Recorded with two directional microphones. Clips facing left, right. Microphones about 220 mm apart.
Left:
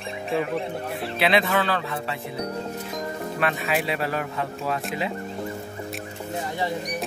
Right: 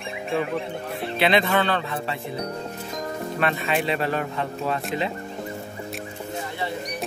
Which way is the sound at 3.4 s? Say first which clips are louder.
Right 1 dB; centre (ahead or behind).